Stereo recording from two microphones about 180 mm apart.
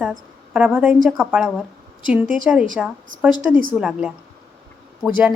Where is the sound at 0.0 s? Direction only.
5° right (ahead or behind).